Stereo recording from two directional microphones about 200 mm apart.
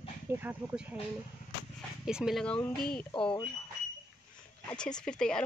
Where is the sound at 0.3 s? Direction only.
10° right (ahead or behind).